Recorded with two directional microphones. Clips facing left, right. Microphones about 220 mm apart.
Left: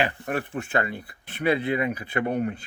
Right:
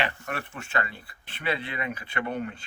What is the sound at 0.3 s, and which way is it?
Speech, 35° left (ahead or behind).